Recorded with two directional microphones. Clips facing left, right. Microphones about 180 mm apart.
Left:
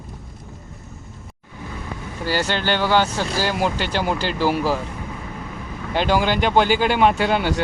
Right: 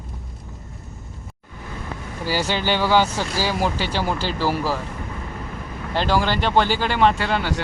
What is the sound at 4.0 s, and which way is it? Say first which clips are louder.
Speech: left 3 dB; 15° left (ahead or behind).